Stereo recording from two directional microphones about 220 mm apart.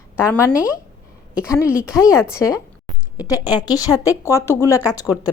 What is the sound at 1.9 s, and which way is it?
A woman's voice, 15° left (ahead or behind).